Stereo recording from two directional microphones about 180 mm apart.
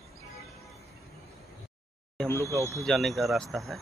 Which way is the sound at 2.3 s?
15° left (ahead or behind).